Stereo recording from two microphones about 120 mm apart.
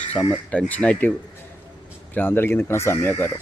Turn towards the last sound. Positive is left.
turn(degrees=20)  # may be behind; listen again after turning